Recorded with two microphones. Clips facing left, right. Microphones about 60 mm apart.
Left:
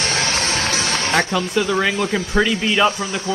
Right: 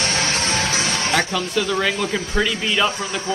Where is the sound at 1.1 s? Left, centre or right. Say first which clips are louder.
Left 3 dB; centre.